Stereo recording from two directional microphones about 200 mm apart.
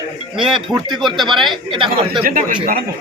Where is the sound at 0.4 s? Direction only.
Centre (ahead or behind).